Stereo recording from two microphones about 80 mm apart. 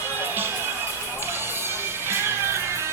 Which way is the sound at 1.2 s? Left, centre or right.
Right.